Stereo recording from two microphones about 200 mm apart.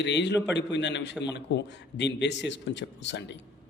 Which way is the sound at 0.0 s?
60° left (ahead or behind).